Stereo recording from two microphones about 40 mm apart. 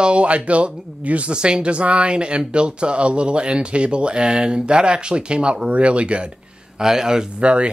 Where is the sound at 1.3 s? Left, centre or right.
Right.